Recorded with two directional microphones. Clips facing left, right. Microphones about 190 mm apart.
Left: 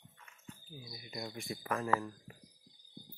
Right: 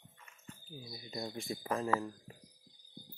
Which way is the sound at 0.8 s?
30° right (ahead or behind).